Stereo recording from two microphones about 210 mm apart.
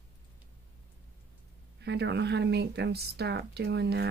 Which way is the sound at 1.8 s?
55° right (ahead or behind).